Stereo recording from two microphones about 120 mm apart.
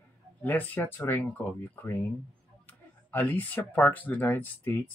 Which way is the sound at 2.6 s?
15° left (ahead or behind).